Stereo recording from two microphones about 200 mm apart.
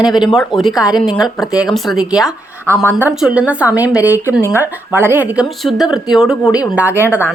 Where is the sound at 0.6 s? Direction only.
Centre (ahead or behind).